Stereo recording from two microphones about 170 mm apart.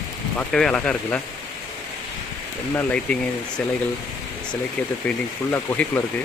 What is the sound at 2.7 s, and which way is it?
Speech, 5° left (ahead or behind).